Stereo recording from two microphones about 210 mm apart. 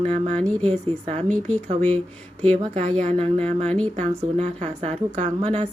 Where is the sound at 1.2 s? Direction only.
35° right (ahead or behind).